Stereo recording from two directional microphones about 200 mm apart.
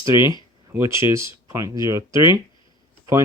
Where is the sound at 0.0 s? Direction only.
15° right (ahead or behind).